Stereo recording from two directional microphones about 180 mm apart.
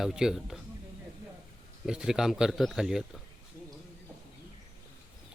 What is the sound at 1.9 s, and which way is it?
Speech, 5° right (ahead or behind).